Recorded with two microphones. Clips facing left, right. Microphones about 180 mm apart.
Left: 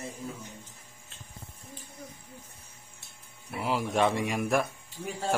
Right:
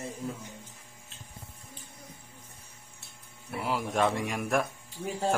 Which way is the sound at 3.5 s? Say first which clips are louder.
Left 1 dB; centre (ahead or behind).